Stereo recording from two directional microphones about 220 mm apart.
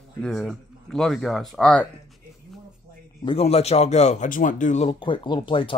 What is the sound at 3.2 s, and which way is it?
Speech, 25° left (ahead or behind).